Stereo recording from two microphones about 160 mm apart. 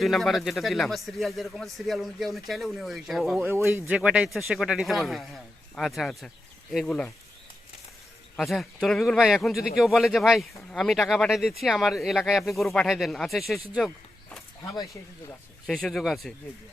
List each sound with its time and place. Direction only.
0.0 s speech: centre (ahead or behind)
3.3 s speech: 10° right (ahead or behind); by 7.1 s 5° left (ahead or behind)
8.4 s speech: centre (ahead or behind)
14.6 s speech: 25° left (ahead or behind)
15.6 s speech: centre (ahead or behind)